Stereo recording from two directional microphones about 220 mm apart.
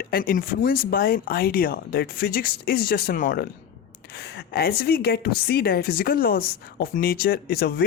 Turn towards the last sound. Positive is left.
turn(degrees=45)  # may be behind; listen again after turning